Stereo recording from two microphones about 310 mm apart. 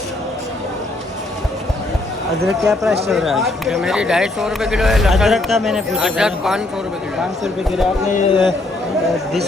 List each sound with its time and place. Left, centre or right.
2.6 s speech: centre
8.1 s a man's voice: centre